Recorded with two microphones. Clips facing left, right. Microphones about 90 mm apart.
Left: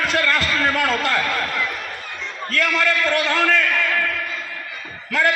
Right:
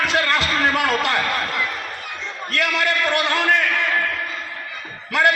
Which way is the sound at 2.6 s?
65° right (ahead or behind).